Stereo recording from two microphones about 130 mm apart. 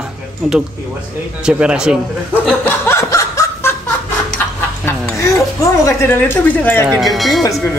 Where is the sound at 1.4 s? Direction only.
10° right (ahead or behind).